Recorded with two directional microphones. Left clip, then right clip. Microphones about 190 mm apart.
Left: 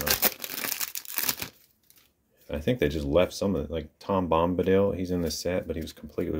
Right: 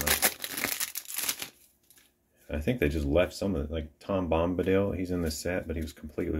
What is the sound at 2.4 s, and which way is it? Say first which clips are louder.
Speech: left 3 dB; 25° left (ahead or behind).